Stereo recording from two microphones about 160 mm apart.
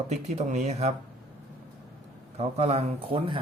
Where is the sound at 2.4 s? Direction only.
40° right (ahead or behind).